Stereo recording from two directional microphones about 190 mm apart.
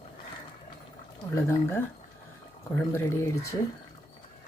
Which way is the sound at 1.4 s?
10° left (ahead or behind).